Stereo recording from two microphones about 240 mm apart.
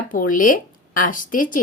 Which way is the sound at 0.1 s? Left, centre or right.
Left.